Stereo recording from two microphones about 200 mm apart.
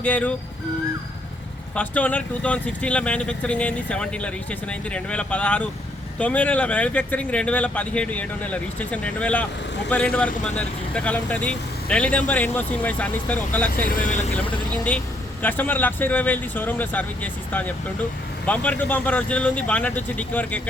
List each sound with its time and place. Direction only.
0.0 s speech: 5° left (ahead or behind)
1.7 s speech: 5° left (ahead or behind)
13.9 s speech: 40° left (ahead or behind)
14.3 s speech: 5° left (ahead or behind)